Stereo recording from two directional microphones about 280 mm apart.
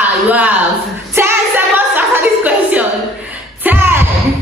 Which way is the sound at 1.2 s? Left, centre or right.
Centre.